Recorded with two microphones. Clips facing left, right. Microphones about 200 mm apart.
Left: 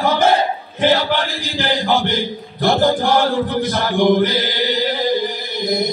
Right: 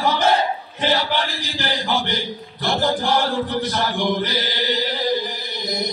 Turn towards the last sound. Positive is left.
turn(degrees=55)  # may be behind; listen again after turning